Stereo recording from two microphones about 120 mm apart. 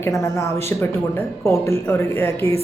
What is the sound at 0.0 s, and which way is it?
Speech, 20° left (ahead or behind).